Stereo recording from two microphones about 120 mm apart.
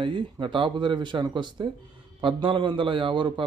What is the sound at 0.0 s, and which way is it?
A man's voice, 45° right (ahead or behind).